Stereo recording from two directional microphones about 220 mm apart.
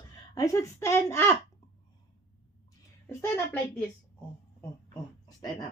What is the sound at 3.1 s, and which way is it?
Speech, 10° left (ahead or behind).